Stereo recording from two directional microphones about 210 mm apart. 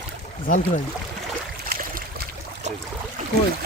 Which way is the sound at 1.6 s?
45° right (ahead or behind).